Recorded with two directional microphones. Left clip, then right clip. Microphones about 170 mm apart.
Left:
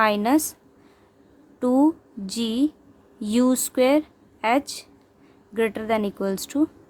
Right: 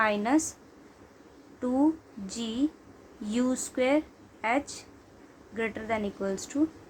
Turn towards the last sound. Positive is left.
turn(degrees=65)  # may be behind; listen again after turning